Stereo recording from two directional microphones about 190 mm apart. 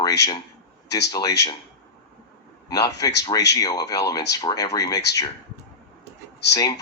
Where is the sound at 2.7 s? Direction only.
20° left (ahead or behind).